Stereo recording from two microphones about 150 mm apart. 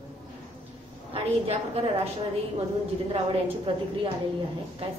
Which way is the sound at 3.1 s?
35° right (ahead or behind).